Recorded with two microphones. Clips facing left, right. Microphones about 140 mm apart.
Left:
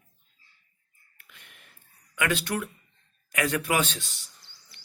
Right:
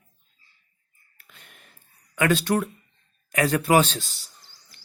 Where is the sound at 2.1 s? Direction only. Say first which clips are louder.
Right 6 dB; 35° right (ahead or behind).